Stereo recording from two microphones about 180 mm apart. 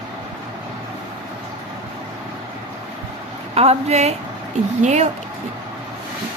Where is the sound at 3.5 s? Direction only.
35° right (ahead or behind).